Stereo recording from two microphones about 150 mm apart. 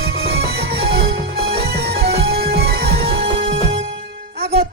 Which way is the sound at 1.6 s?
90° right.